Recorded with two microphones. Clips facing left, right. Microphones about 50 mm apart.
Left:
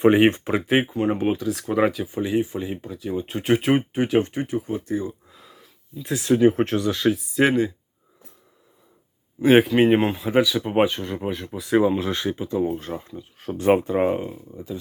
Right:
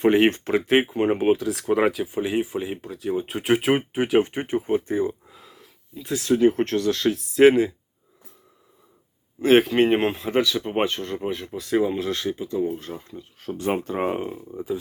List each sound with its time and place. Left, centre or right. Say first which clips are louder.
0.0 s speech: left 2 dB; centre
0.7 s speech: right 1 dB; centre
0.9 s speech: right 1 dB; right
1.2 s speech: right 2 dB; centre
4.4 s speech: right 3 dB; right
5.3 s a sound: right 1 dB; centre
6.1 s speech: left 1 dB; centre
9.4 s speech: left 1 dB; centre
11.6 s speech: left 3 dB; centre
14.1 s speech: left 1 dB; centre